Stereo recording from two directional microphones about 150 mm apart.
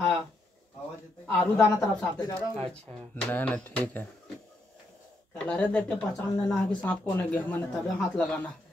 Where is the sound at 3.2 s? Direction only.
10° left (ahead or behind).